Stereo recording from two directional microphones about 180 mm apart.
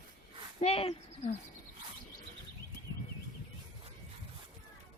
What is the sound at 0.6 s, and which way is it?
Speech, 35° left (ahead or behind).